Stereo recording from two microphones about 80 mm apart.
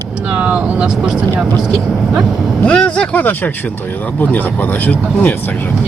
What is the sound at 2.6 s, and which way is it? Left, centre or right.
Speech, centre.